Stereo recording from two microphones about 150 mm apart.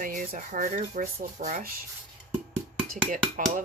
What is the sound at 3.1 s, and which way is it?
Speech, 65° right (ahead or behind).